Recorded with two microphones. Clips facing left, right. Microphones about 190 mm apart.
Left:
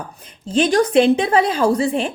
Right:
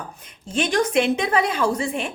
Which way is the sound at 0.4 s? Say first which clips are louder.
Left 6 dB; 30° left (ahead or behind).